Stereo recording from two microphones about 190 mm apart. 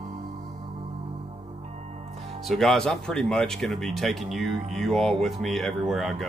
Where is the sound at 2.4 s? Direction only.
Centre (ahead or behind).